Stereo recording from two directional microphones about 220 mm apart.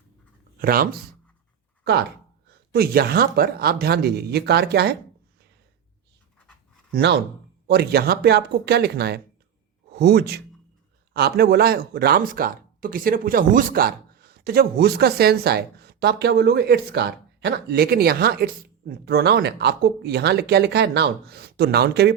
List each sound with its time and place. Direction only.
0.6 s speech: 40° right (ahead or behind)
6.9 s speech: 50° right (ahead or behind)